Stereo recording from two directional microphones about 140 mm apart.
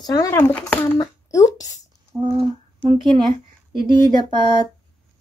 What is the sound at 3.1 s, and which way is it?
Speech, 50° right (ahead or behind).